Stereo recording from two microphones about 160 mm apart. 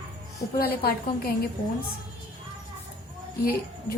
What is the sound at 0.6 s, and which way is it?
Speech, 70° left (ahead or behind).